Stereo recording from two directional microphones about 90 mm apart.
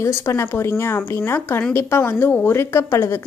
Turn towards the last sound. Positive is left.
turn(degrees=30)  # may be behind; listen again after turning